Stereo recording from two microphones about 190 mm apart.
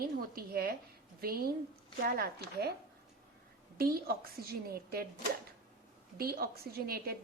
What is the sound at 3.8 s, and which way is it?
Speech, 50° right (ahead or behind).